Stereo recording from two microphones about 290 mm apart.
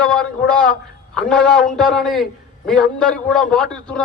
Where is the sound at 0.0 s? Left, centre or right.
Centre.